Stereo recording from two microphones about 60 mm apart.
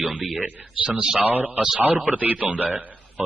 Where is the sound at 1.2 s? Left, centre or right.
Right.